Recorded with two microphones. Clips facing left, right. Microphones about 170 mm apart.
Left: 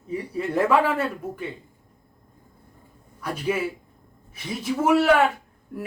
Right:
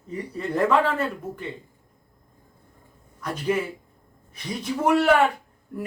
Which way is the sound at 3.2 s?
10° left (ahead or behind).